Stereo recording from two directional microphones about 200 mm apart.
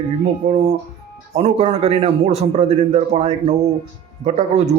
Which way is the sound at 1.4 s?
30° right (ahead or behind).